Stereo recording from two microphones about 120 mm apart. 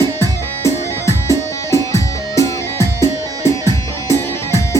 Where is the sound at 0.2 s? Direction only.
25° left (ahead or behind).